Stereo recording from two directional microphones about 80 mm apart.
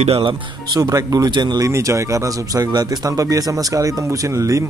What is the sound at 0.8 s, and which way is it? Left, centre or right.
Speech, right.